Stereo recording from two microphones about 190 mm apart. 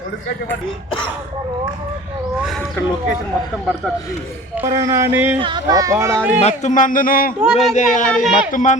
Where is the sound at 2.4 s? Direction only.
Centre (ahead or behind).